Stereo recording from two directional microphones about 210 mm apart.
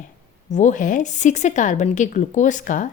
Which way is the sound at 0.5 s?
35° left (ahead or behind).